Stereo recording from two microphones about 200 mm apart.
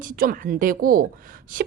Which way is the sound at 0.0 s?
45° right (ahead or behind).